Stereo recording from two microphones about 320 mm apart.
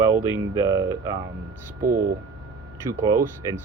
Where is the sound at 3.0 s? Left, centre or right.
Centre.